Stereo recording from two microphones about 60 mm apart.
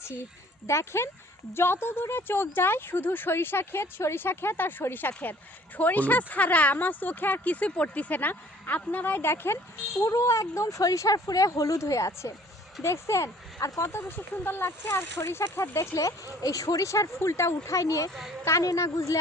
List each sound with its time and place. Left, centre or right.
0.7 s speech: left
10.0 s speech: left
14.8 s speech: left
15.3 s speech: left
16.4 s speech: left
18.1 s a woman's voice: centre
18.6 s speech: left